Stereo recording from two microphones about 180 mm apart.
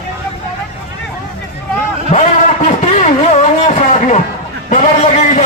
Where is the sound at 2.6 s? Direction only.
40° left (ahead or behind).